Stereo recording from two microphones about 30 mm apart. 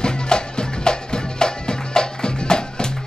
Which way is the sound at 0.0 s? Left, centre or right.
Left.